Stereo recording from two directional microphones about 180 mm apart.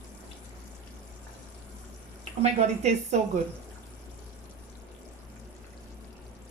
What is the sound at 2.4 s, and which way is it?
Speech, 40° right (ahead or behind).